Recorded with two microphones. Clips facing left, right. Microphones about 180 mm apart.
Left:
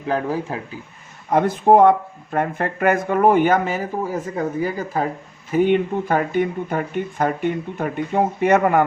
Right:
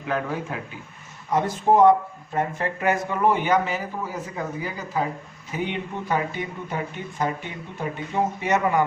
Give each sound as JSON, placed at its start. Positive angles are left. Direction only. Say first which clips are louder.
{"t": 0.0, "sound": "speech", "louder": "left 5 dB", "side_deg": 35}
{"t": 1.3, "sound": "speech", "louder": "left 6 dB", "side_deg": 55}